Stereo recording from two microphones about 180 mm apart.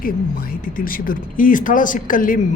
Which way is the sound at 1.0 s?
50° left (ahead or behind).